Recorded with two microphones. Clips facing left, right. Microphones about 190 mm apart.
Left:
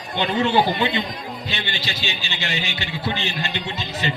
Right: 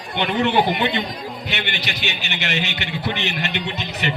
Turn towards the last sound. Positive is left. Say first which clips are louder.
# right 1 dB
turn(degrees=-20)  # may be behind; listen again after turning